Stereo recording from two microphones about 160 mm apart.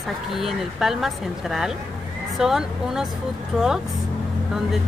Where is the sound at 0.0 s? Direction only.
Centre (ahead or behind).